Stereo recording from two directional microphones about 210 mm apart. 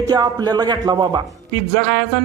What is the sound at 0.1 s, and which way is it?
Speech, 20° right (ahead or behind).